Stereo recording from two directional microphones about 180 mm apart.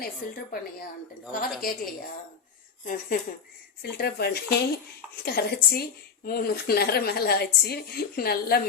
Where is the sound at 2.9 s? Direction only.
50° left (ahead or behind).